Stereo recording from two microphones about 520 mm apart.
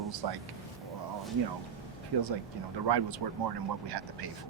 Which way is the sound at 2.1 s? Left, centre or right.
Right.